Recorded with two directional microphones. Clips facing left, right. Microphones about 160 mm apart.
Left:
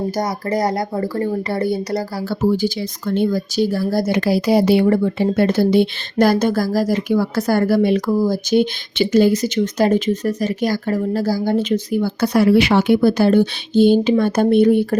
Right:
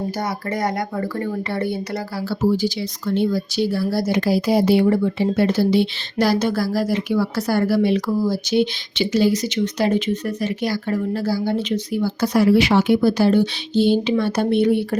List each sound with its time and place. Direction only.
0.2 s speech: 35° left (ahead or behind)
2.4 s a woman's voice: 55° left (ahead or behind)
4.1 s a woman's voice: 70° left (ahead or behind)
5.0 s a woman's voice: 50° left (ahead or behind)